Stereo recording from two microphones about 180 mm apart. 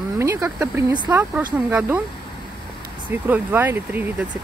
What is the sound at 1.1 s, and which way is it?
Speech, 10° right (ahead or behind).